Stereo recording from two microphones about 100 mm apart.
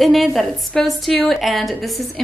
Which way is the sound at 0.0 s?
Centre (ahead or behind).